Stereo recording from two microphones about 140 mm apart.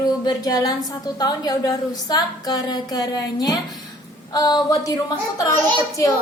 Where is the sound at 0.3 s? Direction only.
30° left (ahead or behind).